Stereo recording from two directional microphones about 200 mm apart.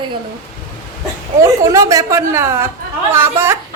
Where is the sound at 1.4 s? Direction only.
15° right (ahead or behind).